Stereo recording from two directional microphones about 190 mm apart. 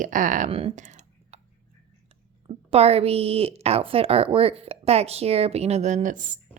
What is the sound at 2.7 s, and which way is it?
A woman's voice, 30° right (ahead or behind).